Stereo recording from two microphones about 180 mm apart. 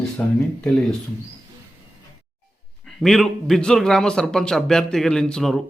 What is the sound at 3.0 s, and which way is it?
A man's voice, centre (ahead or behind).